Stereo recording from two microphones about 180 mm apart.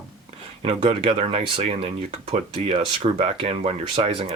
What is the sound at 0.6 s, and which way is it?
Speech, 30° right (ahead or behind).